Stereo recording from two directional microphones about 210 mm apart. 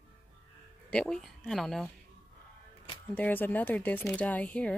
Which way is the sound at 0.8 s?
5° left (ahead or behind).